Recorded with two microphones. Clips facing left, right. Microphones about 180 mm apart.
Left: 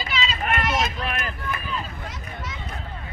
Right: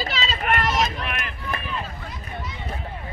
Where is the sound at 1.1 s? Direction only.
35° left (ahead or behind).